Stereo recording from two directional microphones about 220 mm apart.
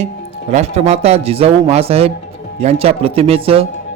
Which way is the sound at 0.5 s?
30° right (ahead or behind).